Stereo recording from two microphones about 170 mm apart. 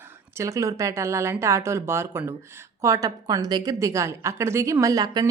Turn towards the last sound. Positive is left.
turn(degrees=-20)  # may be behind; listen again after turning